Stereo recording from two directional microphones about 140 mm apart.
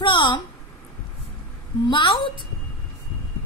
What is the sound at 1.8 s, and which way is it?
Child singing, 35° left (ahead or behind).